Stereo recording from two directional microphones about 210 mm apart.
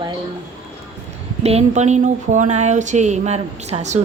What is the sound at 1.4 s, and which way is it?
Speech, 30° right (ahead or behind).